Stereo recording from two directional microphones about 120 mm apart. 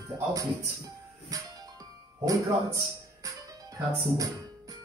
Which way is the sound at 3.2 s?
30° right (ahead or behind).